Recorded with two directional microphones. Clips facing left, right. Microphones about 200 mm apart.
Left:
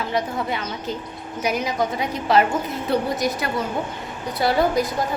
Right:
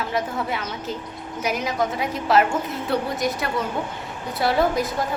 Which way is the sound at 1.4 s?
Centre (ahead or behind).